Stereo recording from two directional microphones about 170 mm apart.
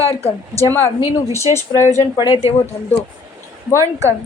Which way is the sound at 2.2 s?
30° left (ahead or behind).